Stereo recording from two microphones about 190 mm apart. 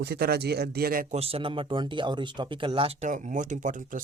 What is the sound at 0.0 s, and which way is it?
Speech, 55° right (ahead or behind).